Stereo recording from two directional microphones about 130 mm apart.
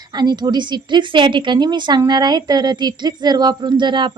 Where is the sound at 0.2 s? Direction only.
35° right (ahead or behind).